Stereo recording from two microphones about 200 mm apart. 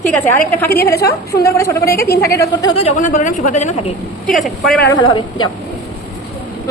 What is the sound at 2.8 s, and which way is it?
A woman's voice, 40° left (ahead or behind).